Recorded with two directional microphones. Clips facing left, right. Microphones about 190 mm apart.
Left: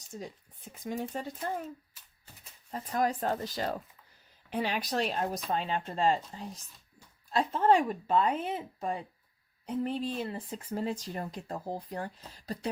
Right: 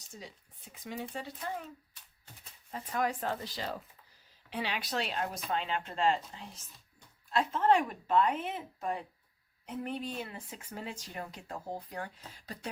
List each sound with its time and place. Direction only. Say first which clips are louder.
0.1 s speech: left 7 dB; 50° left (ahead or behind)
1.9 s a sound: left 1 dB; 5° left (ahead or behind)
2.7 s speech: left 3 dB; 40° left (ahead or behind)